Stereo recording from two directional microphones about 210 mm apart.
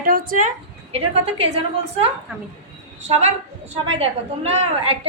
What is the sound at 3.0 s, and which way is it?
A woman's voice, 30° right (ahead or behind).